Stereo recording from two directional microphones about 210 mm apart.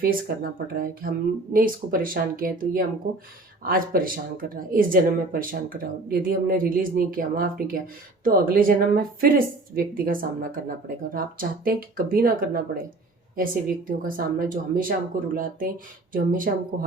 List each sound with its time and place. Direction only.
0.0 s speech: 45° right (ahead or behind)